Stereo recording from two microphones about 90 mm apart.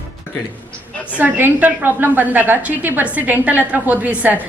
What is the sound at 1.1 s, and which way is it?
A woman's voice, 20° right (ahead or behind).